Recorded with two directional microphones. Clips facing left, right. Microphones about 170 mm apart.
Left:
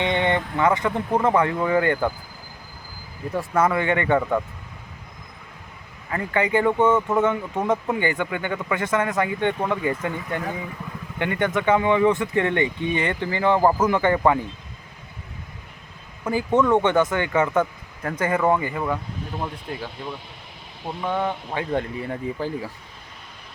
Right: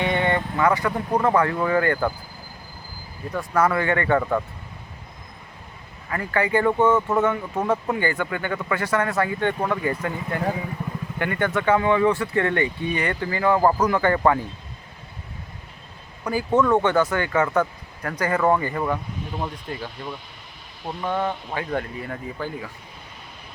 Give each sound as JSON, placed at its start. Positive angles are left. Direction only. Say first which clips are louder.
{"t": 0.0, "sound": "speech", "louder": "even", "side_deg": 20}
{"t": 3.3, "sound": "speech", "louder": "even", "side_deg": 20}
{"t": 6.1, "sound": "speech", "louder": "even", "side_deg": 20}
{"t": 10.1, "sound": "speech", "louder": "even", "side_deg": -25}
{"t": 11.2, "sound": "speech", "louder": "left 1 dB", "side_deg": 20}
{"t": 16.2, "sound": "speech", "louder": "even", "side_deg": 20}
{"t": 19.4, "sound": "speech", "louder": "even", "side_deg": 0}
{"t": 21.2, "sound": "speech", "louder": "left 1 dB", "side_deg": 20}